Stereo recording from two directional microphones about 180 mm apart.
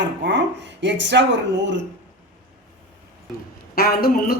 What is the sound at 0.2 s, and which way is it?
Speech, 80° right.